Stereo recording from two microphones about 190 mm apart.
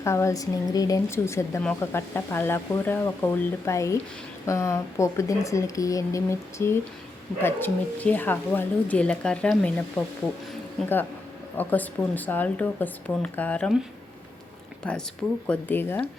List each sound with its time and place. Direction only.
0.0 s speech: 15° left (ahead or behind)
11.5 s speech: 10° left (ahead or behind)
14.8 s speech: 5° left (ahead or behind)